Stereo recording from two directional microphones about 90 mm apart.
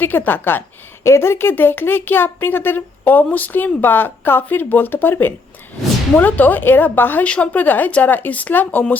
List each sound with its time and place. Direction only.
0.0 s speech: 20° left (ahead or behind)